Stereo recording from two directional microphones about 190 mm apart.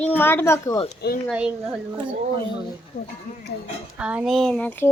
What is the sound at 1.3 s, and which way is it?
Female singing, 5° right (ahead or behind).